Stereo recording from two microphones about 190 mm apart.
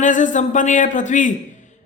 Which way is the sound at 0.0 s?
40° left (ahead or behind).